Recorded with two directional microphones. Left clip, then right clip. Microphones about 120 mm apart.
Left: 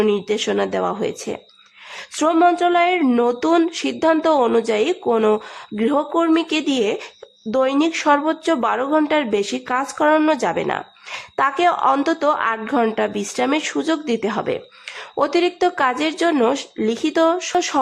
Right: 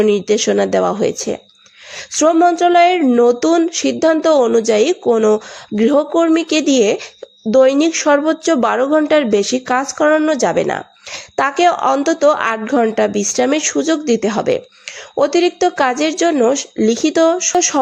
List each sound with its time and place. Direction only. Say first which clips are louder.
0.1 s speech: right 6 dB; 30° right (ahead or behind)
2.3 s a woman's voice: right 3 dB; 15° right (ahead or behind)
4.7 s a woman's voice: right 6 dB; 30° right (ahead or behind)
5.0 s a woman's voice: right 2 dB; 15° right (ahead or behind)
5.7 s a woman's voice: right 6 dB; 25° right (ahead or behind)
8.6 s a woman's voice: right 5 dB; 35° right (ahead or behind)
10.0 s a woman's voice: right 2 dB; 20° right (ahead or behind)
15.8 s a woman's voice: right 5 dB; 30° right (ahead or behind)